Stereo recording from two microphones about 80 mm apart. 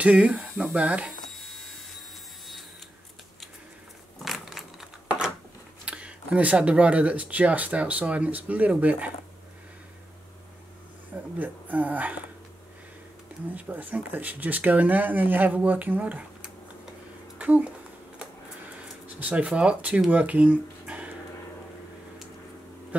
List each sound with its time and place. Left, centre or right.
0.0 s speech: centre
1.2 s printer: centre
4.2 s typing: centre
5.9 s speech: centre
11.3 s speech: right
13.6 s speech: centre
19.0 s speech: centre